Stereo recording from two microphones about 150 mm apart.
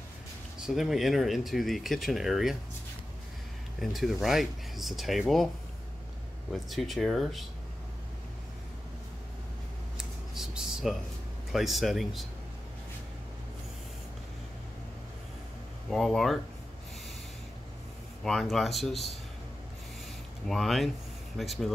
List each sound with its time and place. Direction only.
0.7 s speech: centre (ahead or behind)
3.8 s speech: centre (ahead or behind)
6.5 s speech: centre (ahead or behind)
9.9 s a sound: 5° right (ahead or behind)
11.5 s speech: centre (ahead or behind)
15.9 s speech: centre (ahead or behind)
18.2 s speech: centre (ahead or behind)
20.4 s speech: centre (ahead or behind)